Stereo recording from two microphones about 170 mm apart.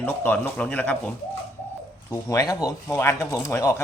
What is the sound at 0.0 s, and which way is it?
A man's voice, 10° left (ahead or behind).